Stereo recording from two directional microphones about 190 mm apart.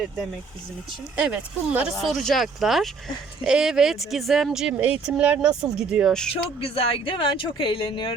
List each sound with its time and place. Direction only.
1.1 s speech: 5° right (ahead or behind)
6.7 s speech: 30° left (ahead or behind)